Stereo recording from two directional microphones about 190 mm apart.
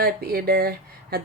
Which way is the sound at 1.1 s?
55° right (ahead or behind).